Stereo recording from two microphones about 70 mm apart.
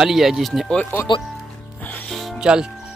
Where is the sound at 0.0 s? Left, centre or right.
Centre.